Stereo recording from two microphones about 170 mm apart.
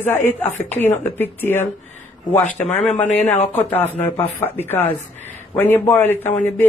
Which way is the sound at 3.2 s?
40° left (ahead or behind).